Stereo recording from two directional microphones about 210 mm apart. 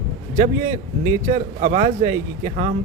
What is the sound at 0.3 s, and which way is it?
A man's voice, 35° right (ahead or behind).